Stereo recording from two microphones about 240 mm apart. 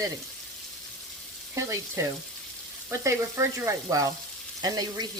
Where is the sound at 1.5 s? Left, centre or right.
Centre.